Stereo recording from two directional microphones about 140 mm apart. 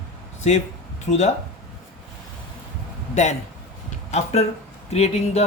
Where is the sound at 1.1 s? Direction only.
60° left (ahead or behind).